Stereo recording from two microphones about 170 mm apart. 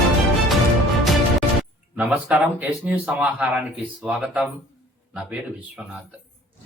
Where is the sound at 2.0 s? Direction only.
5° right (ahead or behind).